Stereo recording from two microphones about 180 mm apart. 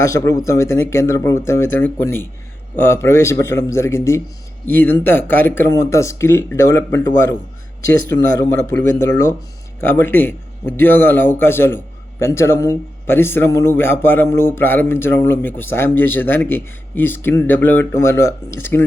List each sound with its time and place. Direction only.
0.0 s a man's voice: 20° left (ahead or behind)
8.1 s a man's voice: 15° left (ahead or behind)